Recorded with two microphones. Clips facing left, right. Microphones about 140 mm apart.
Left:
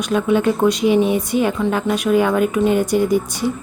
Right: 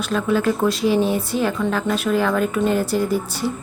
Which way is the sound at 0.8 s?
35° right (ahead or behind).